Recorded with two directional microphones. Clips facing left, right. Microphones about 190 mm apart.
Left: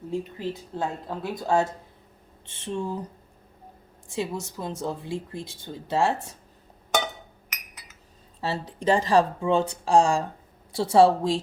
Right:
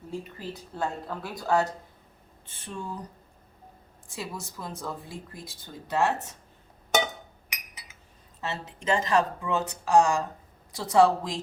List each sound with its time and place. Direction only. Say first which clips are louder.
0.1 s speech: left 6 dB; 20° left (ahead or behind)
4.1 s speech: left 7 dB; 25° left (ahead or behind)
8.4 s speech: left 5 dB; 35° left (ahead or behind)